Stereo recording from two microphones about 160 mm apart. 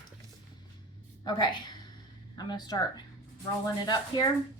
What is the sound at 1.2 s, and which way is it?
A woman's voice, 30° left (ahead or behind).